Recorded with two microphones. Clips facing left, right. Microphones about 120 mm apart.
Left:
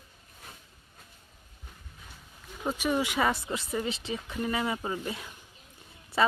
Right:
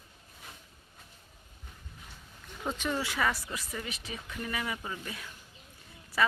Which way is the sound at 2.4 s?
5° left (ahead or behind).